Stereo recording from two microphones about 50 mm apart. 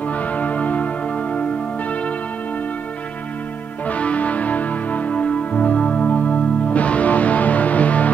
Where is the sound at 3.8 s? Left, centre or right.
Left.